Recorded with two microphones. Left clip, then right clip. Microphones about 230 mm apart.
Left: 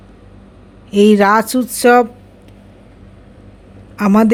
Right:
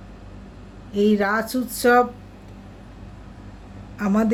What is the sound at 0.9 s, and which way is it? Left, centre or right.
A man's voice, left.